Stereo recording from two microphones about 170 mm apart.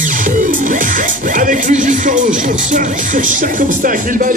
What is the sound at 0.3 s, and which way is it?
Music, 50° right (ahead or behind).